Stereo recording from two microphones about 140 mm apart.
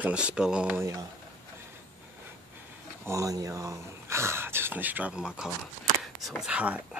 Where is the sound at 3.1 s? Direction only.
25° right (ahead or behind).